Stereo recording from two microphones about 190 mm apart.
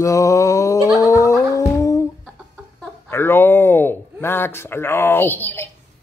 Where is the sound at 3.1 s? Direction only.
10° left (ahead or behind).